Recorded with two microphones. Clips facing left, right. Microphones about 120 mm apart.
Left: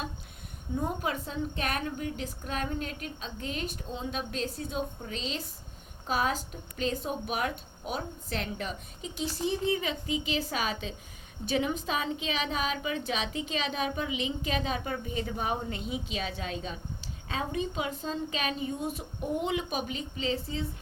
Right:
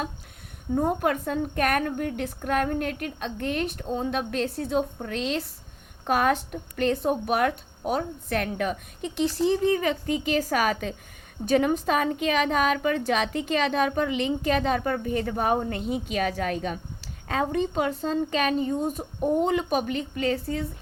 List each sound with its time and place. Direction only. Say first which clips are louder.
0.8 s a woman's voice: right 7 dB; 55° right (ahead or behind)